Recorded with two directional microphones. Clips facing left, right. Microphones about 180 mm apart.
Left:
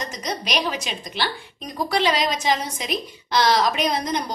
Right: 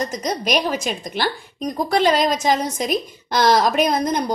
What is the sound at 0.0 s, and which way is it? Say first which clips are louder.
A woman's voice: right 6 dB; 45° right (ahead or behind).